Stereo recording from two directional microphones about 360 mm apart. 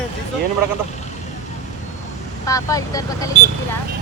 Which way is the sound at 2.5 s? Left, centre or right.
Centre.